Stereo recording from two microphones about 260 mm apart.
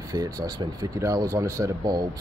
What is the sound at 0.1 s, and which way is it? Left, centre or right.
Speech, centre.